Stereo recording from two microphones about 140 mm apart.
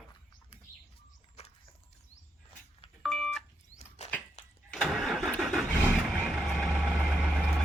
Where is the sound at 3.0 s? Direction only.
5° left (ahead or behind).